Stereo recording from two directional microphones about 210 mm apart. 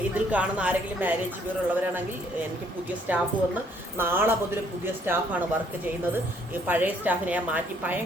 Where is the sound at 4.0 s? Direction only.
10° right (ahead or behind).